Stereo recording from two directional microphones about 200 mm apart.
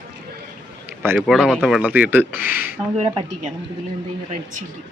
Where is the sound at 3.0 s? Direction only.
25° right (ahead or behind).